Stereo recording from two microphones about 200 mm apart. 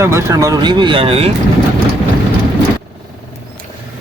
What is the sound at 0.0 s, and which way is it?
Speech, 15° right (ahead or behind).